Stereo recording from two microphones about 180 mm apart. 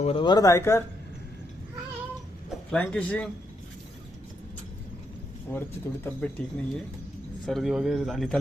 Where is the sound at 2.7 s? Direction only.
5° left (ahead or behind).